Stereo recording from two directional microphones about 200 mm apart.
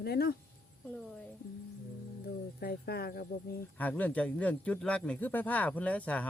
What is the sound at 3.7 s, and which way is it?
Speech, 10° left (ahead or behind).